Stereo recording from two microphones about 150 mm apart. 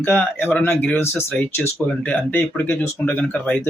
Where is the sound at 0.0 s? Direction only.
10° left (ahead or behind).